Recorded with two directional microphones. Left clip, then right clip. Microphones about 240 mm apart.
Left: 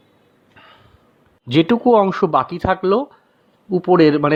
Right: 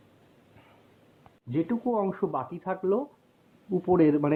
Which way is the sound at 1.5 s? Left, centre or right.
Left.